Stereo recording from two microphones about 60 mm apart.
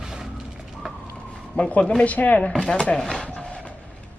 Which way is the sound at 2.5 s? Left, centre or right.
Centre.